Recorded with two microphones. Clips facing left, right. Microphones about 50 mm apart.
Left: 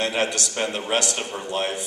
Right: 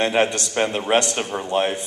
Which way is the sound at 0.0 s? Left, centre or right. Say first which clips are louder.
Right 4 dB; right.